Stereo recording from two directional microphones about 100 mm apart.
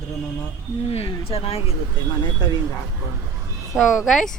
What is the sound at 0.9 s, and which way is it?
Speech, 75° left (ahead or behind).